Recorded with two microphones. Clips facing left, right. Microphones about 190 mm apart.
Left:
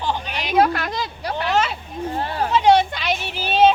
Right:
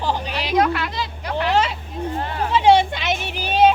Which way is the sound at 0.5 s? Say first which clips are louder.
Left 1 dB; 30° left (ahead or behind).